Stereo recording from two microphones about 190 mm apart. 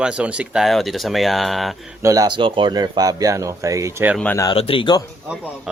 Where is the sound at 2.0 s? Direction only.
20° right (ahead or behind).